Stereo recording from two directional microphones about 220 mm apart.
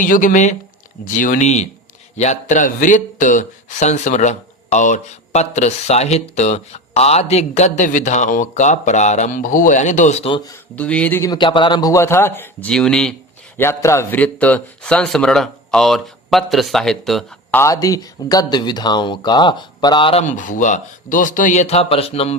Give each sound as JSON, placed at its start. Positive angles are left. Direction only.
{"t": 0.0, "sound": "a man's voice", "side_deg": 35}
{"t": 10.8, "sound": "a man's voice", "side_deg": 5}
{"t": 17.6, "sound": "speech", "side_deg": 15}